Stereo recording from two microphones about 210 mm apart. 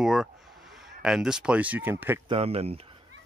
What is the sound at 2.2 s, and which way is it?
Speech, 30° right (ahead or behind).